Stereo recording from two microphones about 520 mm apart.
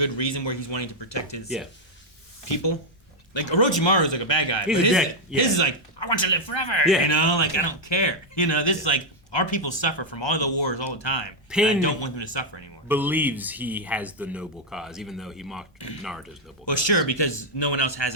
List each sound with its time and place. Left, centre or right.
0.0 s speech: left
3.3 s speech: left
4.6 s speech: centre
5.4 s speech: left
11.4 s a man's voice: centre
11.8 s speech: left
12.9 s speech: centre
16.7 s speech: left